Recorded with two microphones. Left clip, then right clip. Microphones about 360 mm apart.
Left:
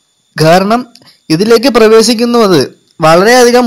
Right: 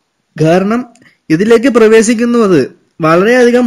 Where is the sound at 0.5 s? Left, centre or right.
Centre.